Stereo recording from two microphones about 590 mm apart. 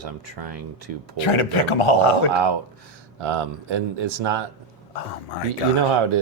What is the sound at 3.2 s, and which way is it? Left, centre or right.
Speech, right.